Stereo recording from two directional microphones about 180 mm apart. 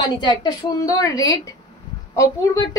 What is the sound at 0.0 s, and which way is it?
A woman's voice, 25° left (ahead or behind).